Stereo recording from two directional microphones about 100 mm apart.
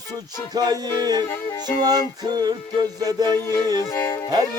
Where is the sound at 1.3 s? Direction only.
20° left (ahead or behind).